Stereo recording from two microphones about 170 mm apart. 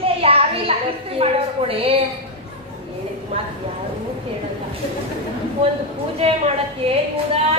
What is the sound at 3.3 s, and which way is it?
Speech, 35° right (ahead or behind).